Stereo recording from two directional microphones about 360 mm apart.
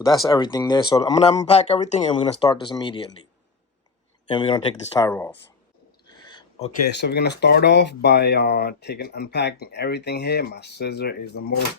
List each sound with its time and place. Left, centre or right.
0.0 s speech: centre
4.3 s speech: centre
6.1 s a sound: centre
6.8 s speech: left